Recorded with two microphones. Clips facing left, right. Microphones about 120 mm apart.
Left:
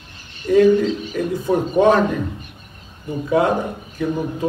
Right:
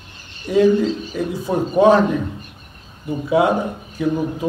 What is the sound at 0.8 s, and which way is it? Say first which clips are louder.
Speech: even; 35° right (ahead or behind).